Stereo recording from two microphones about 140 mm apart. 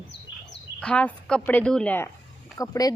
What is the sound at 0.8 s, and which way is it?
A woman's voice, 10° left (ahead or behind).